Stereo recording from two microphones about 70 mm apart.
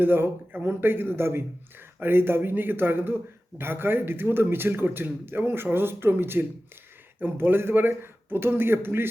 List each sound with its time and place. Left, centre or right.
0.0 s speech: right